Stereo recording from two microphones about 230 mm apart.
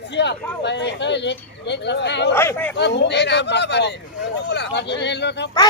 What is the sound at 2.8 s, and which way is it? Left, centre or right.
A man's voice, left.